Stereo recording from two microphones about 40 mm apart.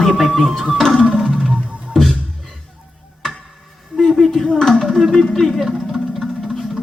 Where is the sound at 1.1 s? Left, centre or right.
Centre.